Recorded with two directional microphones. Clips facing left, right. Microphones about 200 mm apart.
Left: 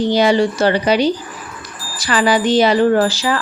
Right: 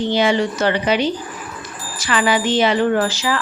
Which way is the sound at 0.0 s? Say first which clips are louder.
Left 3 dB; 40° left (ahead or behind).